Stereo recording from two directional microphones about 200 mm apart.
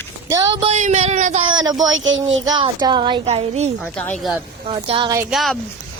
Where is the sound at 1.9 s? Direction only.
70° right (ahead or behind).